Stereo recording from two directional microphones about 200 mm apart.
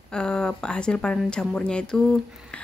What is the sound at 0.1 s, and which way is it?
Speech, 5° left (ahead or behind).